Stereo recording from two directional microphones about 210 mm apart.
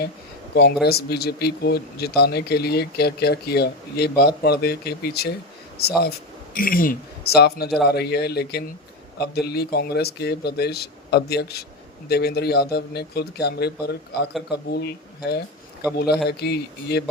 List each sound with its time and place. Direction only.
0.5 s speech: 50° left (ahead or behind)